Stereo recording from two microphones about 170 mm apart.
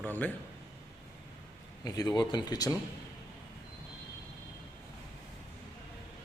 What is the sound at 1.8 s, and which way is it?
Speech, 20° left (ahead or behind).